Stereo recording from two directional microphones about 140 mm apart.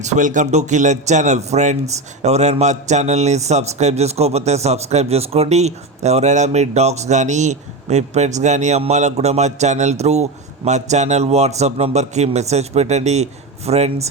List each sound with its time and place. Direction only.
0.0 s a man's voice: 65° right (ahead or behind); by 14.1 s 50° right (ahead or behind)